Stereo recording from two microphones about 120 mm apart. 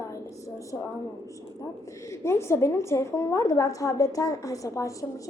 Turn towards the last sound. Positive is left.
turn(degrees=25)  # may be behind; listen again after turning